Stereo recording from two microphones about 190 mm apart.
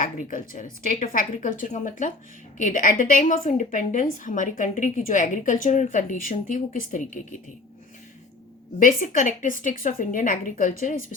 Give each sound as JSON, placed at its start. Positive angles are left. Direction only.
{"t": 0.0, "sound": "a woman's voice", "side_deg": 45}
{"t": 8.8, "sound": "a woman's voice", "side_deg": 45}